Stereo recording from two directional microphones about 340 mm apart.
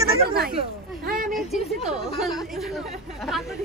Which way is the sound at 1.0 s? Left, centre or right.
Right.